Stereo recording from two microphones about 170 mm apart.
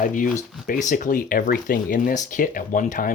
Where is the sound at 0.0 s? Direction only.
50° left (ahead or behind).